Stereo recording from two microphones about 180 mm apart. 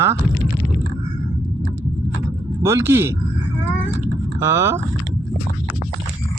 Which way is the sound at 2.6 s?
15° right (ahead or behind).